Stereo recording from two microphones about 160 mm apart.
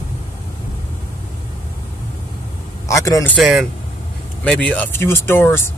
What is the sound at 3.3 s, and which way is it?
Speech, centre (ahead or behind).